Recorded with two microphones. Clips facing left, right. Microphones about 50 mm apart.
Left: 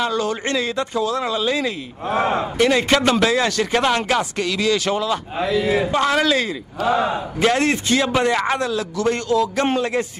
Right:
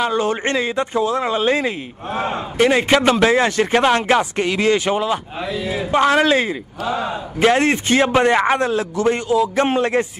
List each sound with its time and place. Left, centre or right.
0.0 s a man's voice: right
2.5 s a man's voice: right
5.5 s speech: left
5.9 s a man's voice: right
6.8 s a man's voice: left
7.4 s a man's voice: right
9.8 s a man's voice: right